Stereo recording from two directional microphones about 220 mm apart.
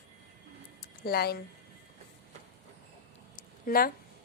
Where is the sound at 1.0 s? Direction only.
45° left (ahead or behind).